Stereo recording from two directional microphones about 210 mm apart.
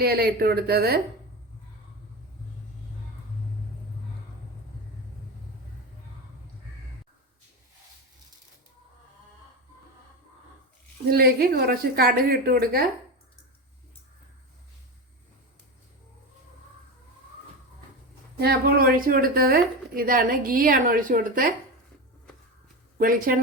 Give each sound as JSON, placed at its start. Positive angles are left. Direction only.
{"t": 0.0, "sound": "speech", "side_deg": -45}
{"t": 11.1, "sound": "speech", "side_deg": -45}
{"t": 18.3, "sound": "speech", "side_deg": -45}
{"t": 23.0, "sound": "speech", "side_deg": -40}